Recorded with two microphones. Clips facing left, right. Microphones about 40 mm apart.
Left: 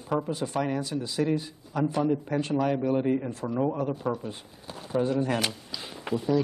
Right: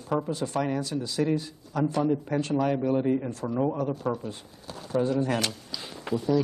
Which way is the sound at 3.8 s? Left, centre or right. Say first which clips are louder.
Even; centre.